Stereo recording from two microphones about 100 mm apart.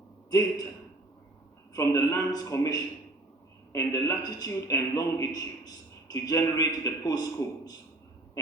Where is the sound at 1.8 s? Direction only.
35° left (ahead or behind).